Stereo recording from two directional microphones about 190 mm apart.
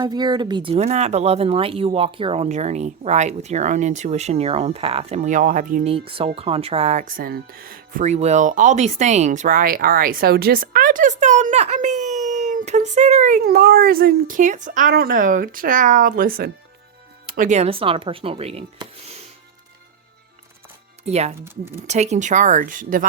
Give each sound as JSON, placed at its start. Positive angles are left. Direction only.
{"t": 0.0, "sound": "speech", "side_deg": -20}
{"t": 5.9, "sound": "speech", "side_deg": -30}
{"t": 21.0, "sound": "speech", "side_deg": -35}
{"t": 21.3, "sound": "speech", "side_deg": -10}
{"t": 21.8, "sound": "speech", "side_deg": -35}